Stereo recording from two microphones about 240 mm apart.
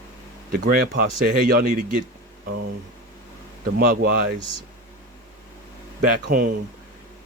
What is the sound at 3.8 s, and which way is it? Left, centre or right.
Speech, right.